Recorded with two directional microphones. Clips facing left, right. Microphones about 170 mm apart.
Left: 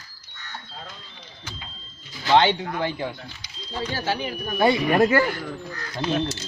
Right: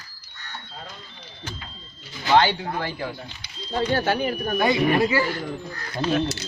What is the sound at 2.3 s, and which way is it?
Speech, 20° left (ahead or behind).